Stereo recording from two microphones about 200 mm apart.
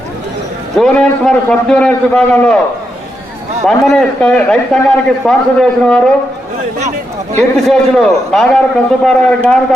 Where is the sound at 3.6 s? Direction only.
Centre (ahead or behind).